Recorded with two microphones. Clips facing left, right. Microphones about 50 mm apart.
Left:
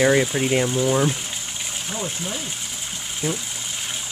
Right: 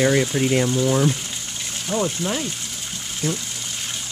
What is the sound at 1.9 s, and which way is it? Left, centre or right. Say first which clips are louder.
Speech: right 8 dB; right.